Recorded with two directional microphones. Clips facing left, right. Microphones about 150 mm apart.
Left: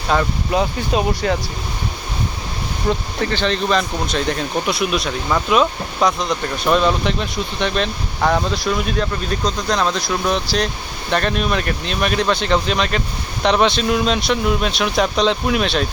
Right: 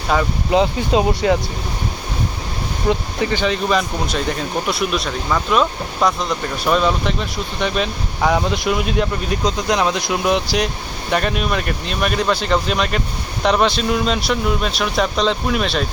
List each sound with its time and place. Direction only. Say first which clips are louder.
0.1 s speech: even; 5° right (ahead or behind)
0.5 s speech: right 4 dB; 20° right (ahead or behind)
2.9 s speech: right 2 dB; 15° right (ahead or behind)